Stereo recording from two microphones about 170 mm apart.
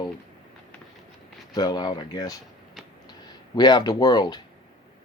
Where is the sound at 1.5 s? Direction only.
25° left (ahead or behind).